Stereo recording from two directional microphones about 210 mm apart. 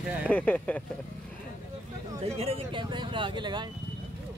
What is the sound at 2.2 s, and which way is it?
Speech, 30° right (ahead or behind).